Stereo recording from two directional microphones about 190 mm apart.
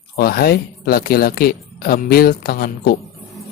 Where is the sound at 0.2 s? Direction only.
50° left (ahead or behind).